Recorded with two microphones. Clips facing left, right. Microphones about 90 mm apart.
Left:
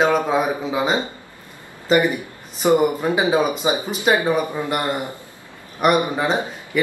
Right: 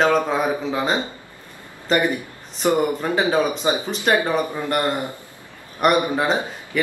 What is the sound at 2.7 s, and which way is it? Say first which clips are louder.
Speech: left 4 dB; 15° left (ahead or behind).